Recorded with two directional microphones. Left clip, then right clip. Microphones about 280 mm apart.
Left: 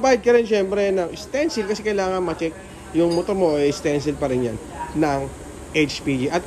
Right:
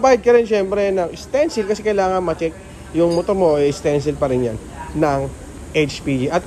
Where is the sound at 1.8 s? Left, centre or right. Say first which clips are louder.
Right 5 dB; centre.